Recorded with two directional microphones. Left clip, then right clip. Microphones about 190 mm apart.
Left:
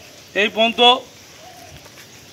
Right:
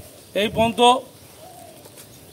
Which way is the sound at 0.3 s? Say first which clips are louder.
Left 3 dB; 60° right (ahead or behind).